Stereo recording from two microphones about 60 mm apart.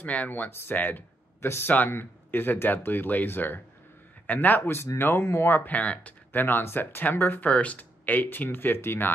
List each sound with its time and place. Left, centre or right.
0.0 s speech: left
4.9 s speech: left
5.7 s speech: left
6.3 s speech: left